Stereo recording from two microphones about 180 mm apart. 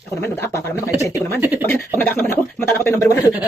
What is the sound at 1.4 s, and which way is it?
Speech, 10° right (ahead or behind).